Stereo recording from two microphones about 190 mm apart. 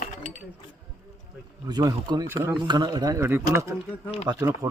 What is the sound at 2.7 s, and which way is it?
Speech, 25° right (ahead or behind).